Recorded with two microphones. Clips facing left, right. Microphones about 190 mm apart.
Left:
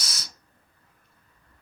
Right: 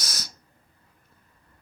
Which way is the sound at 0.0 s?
45° right (ahead or behind).